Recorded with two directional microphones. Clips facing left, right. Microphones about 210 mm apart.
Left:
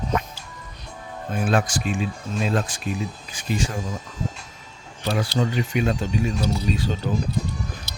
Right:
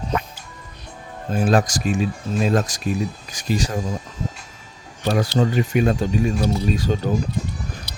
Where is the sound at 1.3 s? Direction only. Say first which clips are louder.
Right 4 dB; 35° right (ahead or behind).